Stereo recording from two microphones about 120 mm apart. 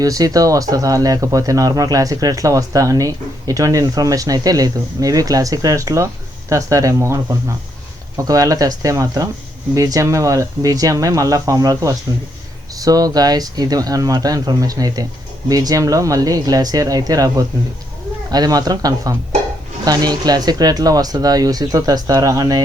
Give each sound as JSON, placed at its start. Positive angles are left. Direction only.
{"t": 0.0, "sound": "speech", "side_deg": -30}